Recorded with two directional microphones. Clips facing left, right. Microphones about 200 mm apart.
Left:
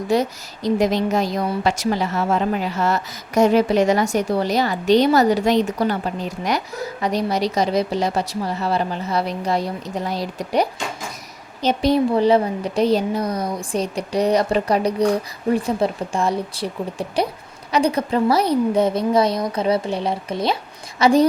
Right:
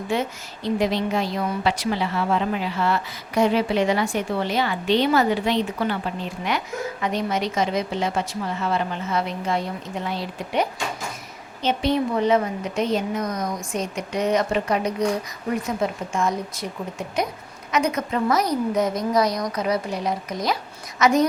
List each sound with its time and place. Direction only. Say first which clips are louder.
0.1 s a woman's voice: left 6 dB; 40° left (ahead or behind)